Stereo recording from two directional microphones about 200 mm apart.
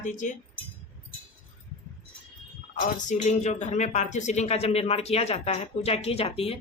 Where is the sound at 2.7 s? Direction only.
40° left (ahead or behind).